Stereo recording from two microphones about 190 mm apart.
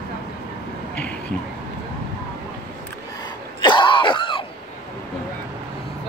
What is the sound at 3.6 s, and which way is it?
Throat clearing, 25° left (ahead or behind).